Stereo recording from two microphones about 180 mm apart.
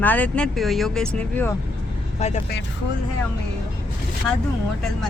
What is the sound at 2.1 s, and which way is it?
Speech, 40° left (ahead or behind).